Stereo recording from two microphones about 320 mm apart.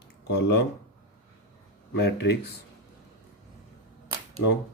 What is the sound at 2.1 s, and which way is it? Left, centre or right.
Speech, left.